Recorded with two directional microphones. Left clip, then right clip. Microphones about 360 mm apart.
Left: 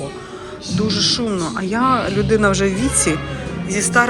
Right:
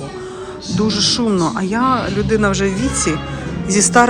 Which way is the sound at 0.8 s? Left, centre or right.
Centre.